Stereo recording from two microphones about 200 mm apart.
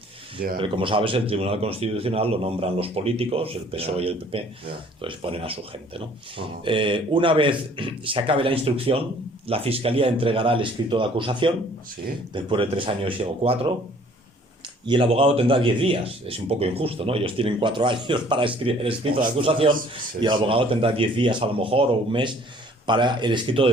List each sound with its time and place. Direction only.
0.5 s speech: 25° right (ahead or behind)
14.8 s speech: 25° right (ahead or behind)